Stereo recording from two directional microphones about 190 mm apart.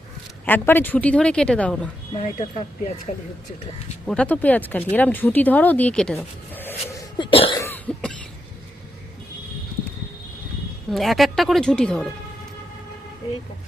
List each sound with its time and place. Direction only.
0.4 s speech: 10° left (ahead or behind)
2.4 s speech: 35° left (ahead or behind)
4.0 s speech: 5° left (ahead or behind)
7.2 s cough: 25° left (ahead or behind)
7.6 s cough: 10° left (ahead or behind)
10.9 s a woman's voice: centre (ahead or behind)